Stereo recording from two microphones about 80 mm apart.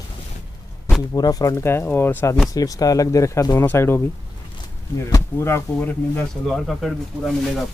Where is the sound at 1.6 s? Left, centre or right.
Left.